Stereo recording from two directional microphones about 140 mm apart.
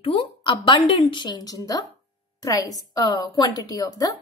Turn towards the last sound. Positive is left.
turn(degrees=25)  # may be behind; listen again after turning